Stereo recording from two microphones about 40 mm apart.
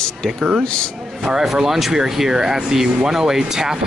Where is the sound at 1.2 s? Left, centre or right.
Centre.